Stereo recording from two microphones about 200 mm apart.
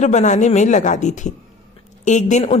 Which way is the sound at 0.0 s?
35° left (ahead or behind).